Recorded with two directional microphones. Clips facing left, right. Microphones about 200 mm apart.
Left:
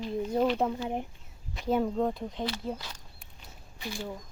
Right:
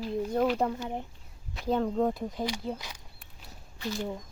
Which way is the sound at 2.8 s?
10° right (ahead or behind).